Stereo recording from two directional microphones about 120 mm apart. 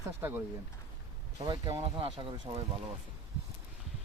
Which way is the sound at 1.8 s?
45° right (ahead or behind).